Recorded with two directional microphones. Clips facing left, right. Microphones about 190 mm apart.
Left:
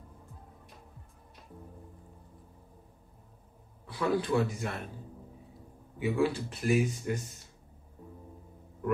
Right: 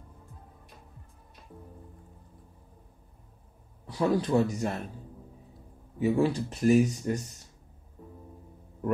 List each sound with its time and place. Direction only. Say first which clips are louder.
3.8 s speech: right 3 dB; 40° right (ahead or behind)
5.9 s speech: right 3 dB; 40° right (ahead or behind)